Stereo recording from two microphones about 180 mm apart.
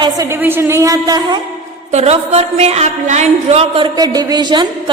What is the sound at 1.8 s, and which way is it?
A woman's voice, 35° right (ahead or behind).